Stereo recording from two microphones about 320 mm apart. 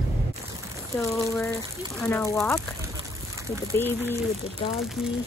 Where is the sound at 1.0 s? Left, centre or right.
Centre.